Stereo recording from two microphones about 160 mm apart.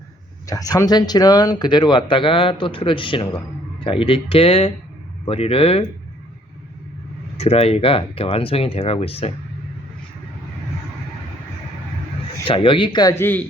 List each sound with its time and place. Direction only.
0.4 s speech: 20° left (ahead or behind); by 5.8 s 40° left (ahead or behind)
7.3 s speech: 40° left (ahead or behind)
12.5 s speech: 35° left (ahead or behind)
13.1 s speech: 15° left (ahead or behind)